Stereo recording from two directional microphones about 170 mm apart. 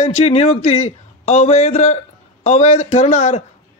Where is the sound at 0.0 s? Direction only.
40° left (ahead or behind).